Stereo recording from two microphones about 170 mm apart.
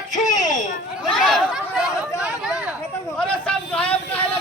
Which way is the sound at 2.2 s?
5° right (ahead or behind).